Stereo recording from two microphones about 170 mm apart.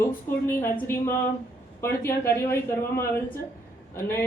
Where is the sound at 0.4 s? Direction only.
15° left (ahead or behind).